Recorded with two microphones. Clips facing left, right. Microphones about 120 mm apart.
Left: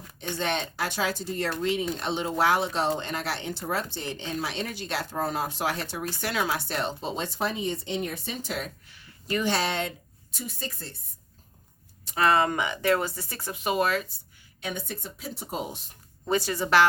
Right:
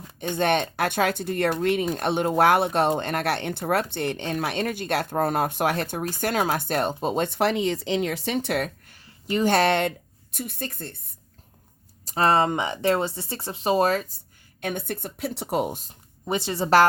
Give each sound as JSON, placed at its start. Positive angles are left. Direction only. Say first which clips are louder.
{"t": 0.2, "sound": "speech", "louder": "right 7 dB", "side_deg": -55}
{"t": 12.0, "sound": "speech", "louder": "right 2 dB", "side_deg": -35}
{"t": 14.6, "sound": "speech", "louder": "right 5 dB", "side_deg": -55}
{"t": 16.2, "sound": "speech", "louder": "even", "side_deg": -20}